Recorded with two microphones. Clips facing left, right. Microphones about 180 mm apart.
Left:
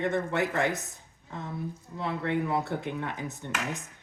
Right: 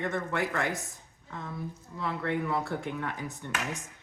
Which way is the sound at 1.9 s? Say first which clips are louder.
Left 2 dB; 20° left (ahead or behind).